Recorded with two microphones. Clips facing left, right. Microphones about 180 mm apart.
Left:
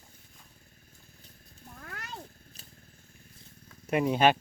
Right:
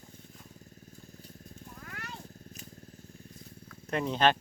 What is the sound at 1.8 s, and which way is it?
Cat, 40° left (ahead or behind).